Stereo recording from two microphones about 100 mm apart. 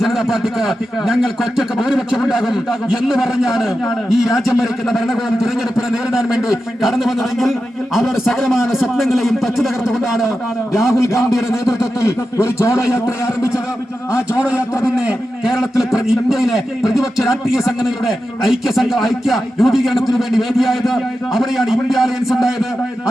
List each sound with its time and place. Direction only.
0.0 s a man's voice: 5° right (ahead or behind)
11.3 s a man's voice: 5° right (ahead or behind)
12.0 s a man's voice: 30° left (ahead or behind)
14.1 s a man's voice: 15° right (ahead or behind)